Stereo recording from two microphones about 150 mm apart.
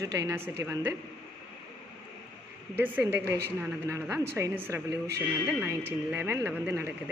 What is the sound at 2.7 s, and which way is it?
A man's voice, 10° right (ahead or behind).